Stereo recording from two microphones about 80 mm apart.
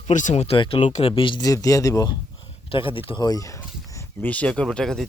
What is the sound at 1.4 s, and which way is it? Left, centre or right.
Speech, left.